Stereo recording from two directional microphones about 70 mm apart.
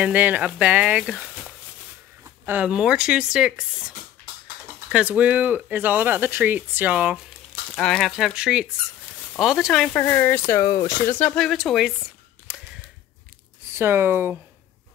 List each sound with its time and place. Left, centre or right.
0.0 s speech: right
2.6 s speech: centre
4.9 s speech: centre
7.7 s speech: centre
8.2 s speech: centre
9.9 s speech: left
11.3 s a woman's voice: centre
13.7 s speech: right